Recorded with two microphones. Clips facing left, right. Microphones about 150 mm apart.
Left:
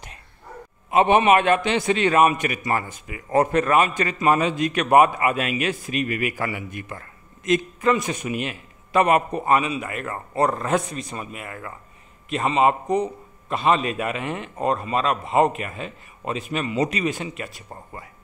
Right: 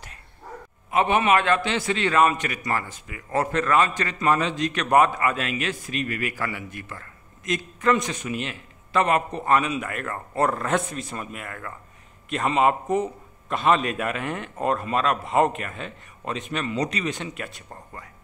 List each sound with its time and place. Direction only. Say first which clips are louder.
0.8 s a man's voice: left 4 dB; 20° left (ahead or behind)
7.8 s a man's voice: left 1 dB; 5° left (ahead or behind)